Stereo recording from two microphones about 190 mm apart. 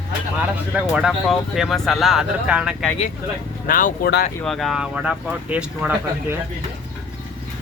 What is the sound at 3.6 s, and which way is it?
Speech, 50° left (ahead or behind).